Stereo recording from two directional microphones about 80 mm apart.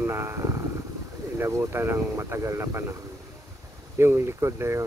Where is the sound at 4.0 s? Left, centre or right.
Right.